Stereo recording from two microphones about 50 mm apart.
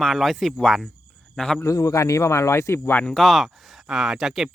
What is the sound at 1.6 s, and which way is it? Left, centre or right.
Speech, left.